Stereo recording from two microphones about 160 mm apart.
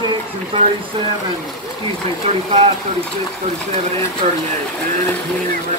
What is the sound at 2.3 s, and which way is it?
Speech, 40° right (ahead or behind).